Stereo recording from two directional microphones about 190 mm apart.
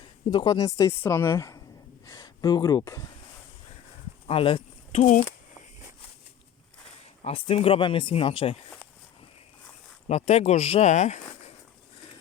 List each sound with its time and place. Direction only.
0.3 s a woman's voice: 20° left (ahead or behind)
4.3 s speech: 30° left (ahead or behind)
7.3 s speech: 30° left (ahead or behind)
10.1 s speech: 35° left (ahead or behind)